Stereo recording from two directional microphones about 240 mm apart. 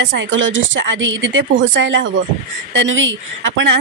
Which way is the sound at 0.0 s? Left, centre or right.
Right.